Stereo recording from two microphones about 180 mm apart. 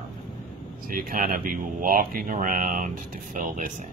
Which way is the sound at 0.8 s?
50° right (ahead or behind).